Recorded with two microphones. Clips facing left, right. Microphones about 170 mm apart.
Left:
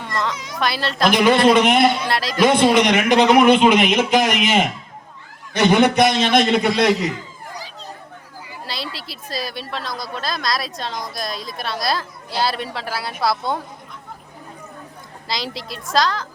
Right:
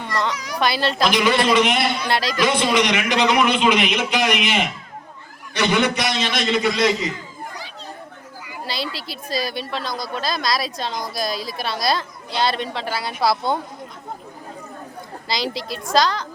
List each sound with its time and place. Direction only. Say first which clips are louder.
0.0 s children playing: right 1 dB; centre (ahead or behind)
0.6 s a woman's voice: even; centre (ahead or behind)
1.1 s a man's voice: left 6 dB; 50° left (ahead or behind)
2.0 s a woman's voice: right 1 dB; centre (ahead or behind)
2.4 s a man's voice: left 6 dB; 55° left (ahead or behind)
8.6 s a woman's voice: right 3 dB; centre (ahead or behind)
15.3 s a woman's voice: right 2 dB; centre (ahead or behind)